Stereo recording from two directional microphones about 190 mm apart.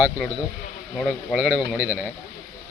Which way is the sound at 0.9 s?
Centre (ahead or behind).